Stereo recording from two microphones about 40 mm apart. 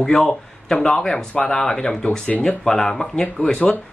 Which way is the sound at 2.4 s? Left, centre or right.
Centre.